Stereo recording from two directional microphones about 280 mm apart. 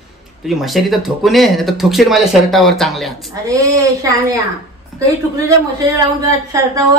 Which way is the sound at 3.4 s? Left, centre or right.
Centre.